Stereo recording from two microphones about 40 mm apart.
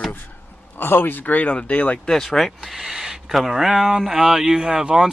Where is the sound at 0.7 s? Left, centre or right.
Left.